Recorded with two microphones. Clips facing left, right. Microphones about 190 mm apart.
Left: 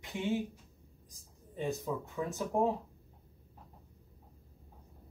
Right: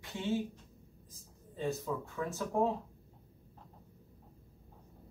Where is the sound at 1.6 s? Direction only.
15° left (ahead or behind).